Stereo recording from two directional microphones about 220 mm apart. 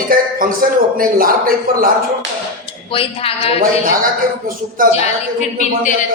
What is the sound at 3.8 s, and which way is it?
A man's voice, 40° right (ahead or behind).